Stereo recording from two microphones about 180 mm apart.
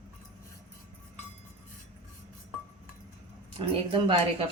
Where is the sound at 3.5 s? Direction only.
30° right (ahead or behind).